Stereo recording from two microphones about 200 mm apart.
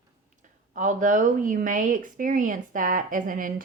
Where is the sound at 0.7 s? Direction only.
40° right (ahead or behind).